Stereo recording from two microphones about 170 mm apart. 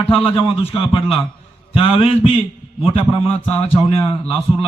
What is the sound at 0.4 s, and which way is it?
A man's voice, 30° left (ahead or behind).